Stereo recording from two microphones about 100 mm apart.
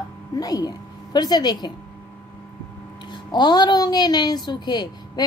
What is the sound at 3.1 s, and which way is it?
Speech, 45° left (ahead or behind).